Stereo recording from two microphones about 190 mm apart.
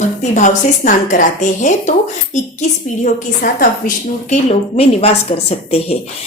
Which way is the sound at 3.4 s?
45° left (ahead or behind).